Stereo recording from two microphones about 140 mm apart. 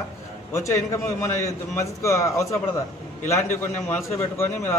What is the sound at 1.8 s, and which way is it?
Speech, 20° left (ahead or behind).